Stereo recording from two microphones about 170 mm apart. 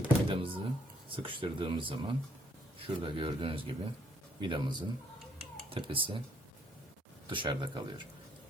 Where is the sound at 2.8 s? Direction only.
30° right (ahead or behind).